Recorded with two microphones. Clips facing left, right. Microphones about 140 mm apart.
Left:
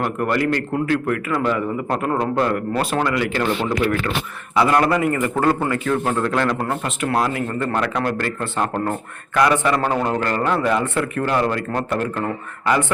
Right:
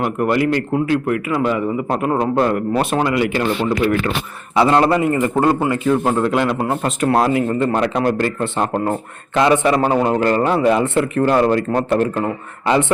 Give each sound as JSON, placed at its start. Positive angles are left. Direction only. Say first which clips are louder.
{"t": 0.0, "sound": "a man's voice", "louder": "right 3 dB", "side_deg": -10}
{"t": 4.5, "sound": "speech", "louder": "right 3 dB", "side_deg": -25}
{"t": 6.8, "sound": "speech", "louder": "right 6 dB", "side_deg": -35}